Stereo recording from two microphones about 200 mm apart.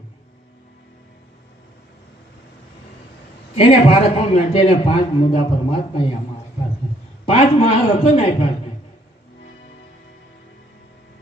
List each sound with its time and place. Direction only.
3.5 s a man's voice: 30° left (ahead or behind)
7.3 s a man's voice: 30° left (ahead or behind)